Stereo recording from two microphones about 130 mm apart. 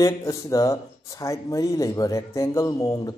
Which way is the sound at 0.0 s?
25° left (ahead or behind).